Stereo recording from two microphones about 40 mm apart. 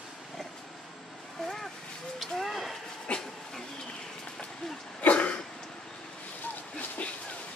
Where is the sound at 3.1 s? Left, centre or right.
Left.